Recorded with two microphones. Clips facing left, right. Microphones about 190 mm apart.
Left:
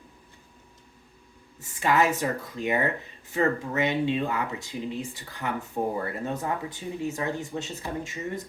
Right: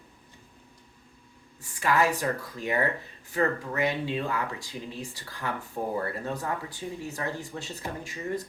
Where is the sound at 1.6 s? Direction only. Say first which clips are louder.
Left 2 dB; 20° left (ahead or behind).